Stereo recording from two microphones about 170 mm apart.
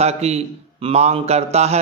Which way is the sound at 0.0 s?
40° right (ahead or behind).